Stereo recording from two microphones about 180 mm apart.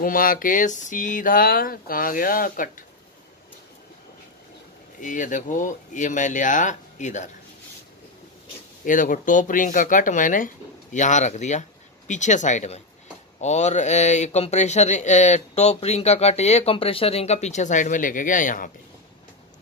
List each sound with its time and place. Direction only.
0.0 s speech: 50° left (ahead or behind)
5.0 s speech: 45° left (ahead or behind)
8.8 s speech: 45° left (ahead or behind)